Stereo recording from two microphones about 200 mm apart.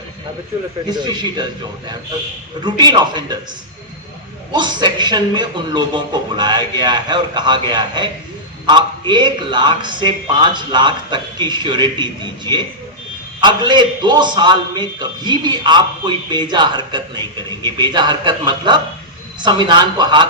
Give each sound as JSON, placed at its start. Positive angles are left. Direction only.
{"t": 0.9, "sound": "a man's voice", "side_deg": -20}
{"t": 2.6, "sound": "a man's voice", "side_deg": -20}
{"t": 4.5, "sound": "a man's voice", "side_deg": -20}